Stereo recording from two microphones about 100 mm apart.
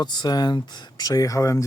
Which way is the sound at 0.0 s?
45° left (ahead or behind).